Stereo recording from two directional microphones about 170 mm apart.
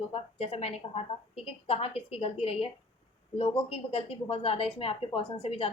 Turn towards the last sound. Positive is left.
turn(degrees=35)  # may be behind; listen again after turning